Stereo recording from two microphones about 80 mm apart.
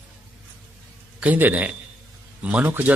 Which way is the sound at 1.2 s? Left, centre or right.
Right.